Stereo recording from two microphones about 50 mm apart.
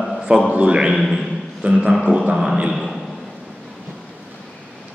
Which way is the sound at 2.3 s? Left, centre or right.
Centre.